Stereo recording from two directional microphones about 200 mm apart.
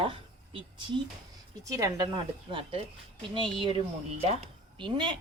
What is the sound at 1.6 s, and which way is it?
A woman's voice, 15° right (ahead or behind).